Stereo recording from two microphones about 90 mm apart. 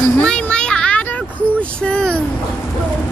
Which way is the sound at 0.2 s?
10° left (ahead or behind).